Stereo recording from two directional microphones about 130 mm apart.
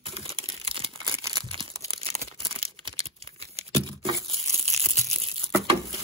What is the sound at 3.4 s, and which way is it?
Computer keyboard, 50° right (ahead or behind).